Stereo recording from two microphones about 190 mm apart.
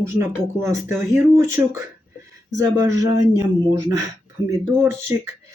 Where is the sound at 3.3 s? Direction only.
20° right (ahead or behind).